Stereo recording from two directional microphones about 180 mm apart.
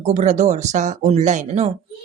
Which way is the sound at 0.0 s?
40° right (ahead or behind).